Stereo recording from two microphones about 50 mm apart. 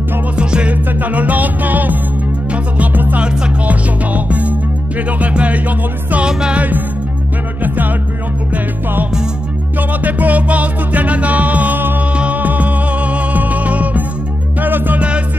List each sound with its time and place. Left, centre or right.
0.4 s music: right
1.0 s music: right
6.2 s music: centre
7.6 s music: right
9.8 s music: right
15.0 s music: right